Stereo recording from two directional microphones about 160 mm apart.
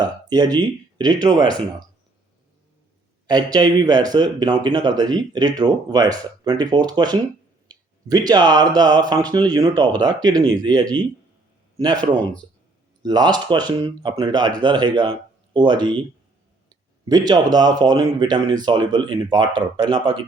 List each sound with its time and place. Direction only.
0.0 s speech: 25° right (ahead or behind)
3.2 s speech: 25° right (ahead or behind)